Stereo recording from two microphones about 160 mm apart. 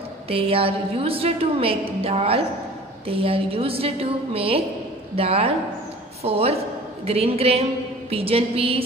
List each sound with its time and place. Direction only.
0.3 s a woman's voice: 35° right (ahead or behind)